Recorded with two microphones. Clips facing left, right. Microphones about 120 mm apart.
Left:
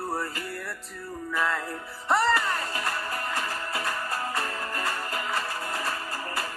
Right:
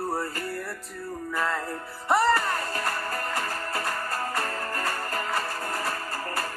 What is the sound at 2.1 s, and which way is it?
Music, 15° right (ahead or behind).